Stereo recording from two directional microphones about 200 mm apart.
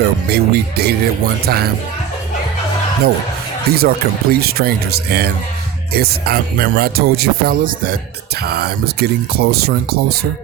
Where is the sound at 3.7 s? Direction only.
50° right (ahead or behind).